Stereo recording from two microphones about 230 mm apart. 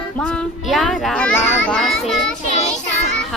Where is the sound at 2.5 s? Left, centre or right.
Left.